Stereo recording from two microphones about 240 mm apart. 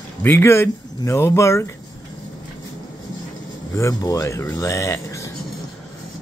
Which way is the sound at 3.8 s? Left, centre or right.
Centre.